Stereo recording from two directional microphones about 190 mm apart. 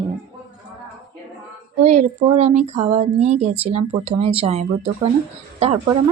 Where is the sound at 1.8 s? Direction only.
35° right (ahead or behind).